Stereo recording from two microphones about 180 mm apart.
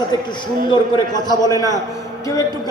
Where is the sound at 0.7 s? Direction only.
25° left (ahead or behind).